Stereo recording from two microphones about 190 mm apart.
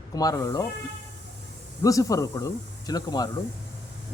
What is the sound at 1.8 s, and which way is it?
A man's voice, 20° left (ahead or behind).